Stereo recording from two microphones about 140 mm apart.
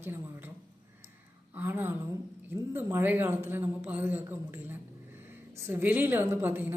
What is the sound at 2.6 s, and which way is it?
A man's voice, 15° right (ahead or behind).